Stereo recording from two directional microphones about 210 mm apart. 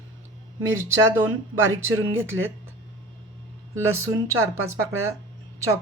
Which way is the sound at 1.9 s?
70° right (ahead or behind).